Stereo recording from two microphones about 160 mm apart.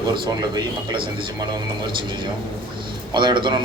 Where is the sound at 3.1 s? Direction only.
30° right (ahead or behind).